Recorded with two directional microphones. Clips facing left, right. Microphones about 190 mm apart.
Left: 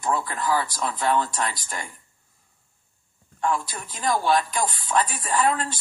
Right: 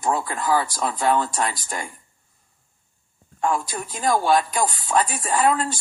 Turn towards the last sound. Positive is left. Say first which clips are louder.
# right 3 dB
turn(degrees=-45)  # may be behind; listen again after turning